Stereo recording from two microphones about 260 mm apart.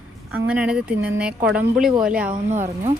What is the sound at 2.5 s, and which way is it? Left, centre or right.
Speech, right.